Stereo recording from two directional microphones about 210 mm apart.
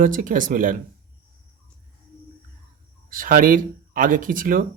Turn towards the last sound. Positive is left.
turn(degrees=-40)  # may be behind; listen again after turning